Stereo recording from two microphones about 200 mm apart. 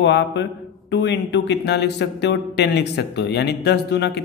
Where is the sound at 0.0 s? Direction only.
60° left (ahead or behind).